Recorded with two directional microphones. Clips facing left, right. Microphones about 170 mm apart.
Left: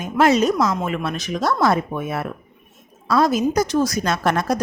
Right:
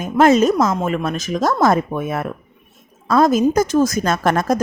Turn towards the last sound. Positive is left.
turn(degrees=-50)  # may be behind; listen again after turning